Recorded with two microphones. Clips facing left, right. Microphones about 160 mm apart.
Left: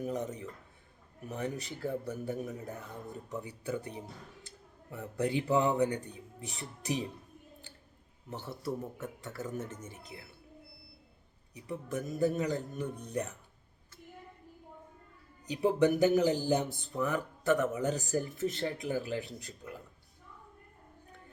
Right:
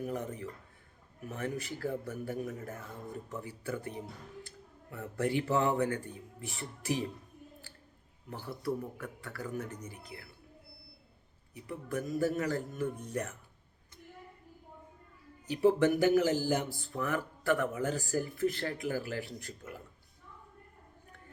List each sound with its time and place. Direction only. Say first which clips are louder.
0.0 s a man's voice: left 1 dB; 20° left (ahead or behind)
8.6 s a man's voice: right 2 dB; 20° left (ahead or behind)
11.5 s a man's voice: even; 20° left (ahead or behind)
15.5 s a man's voice: right 1 dB; 20° left (ahead or behind)